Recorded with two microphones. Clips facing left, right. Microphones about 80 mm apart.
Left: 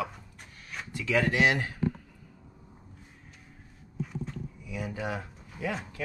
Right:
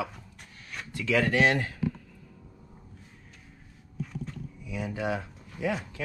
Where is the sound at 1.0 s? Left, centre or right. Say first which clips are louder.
Right 1 dB; centre.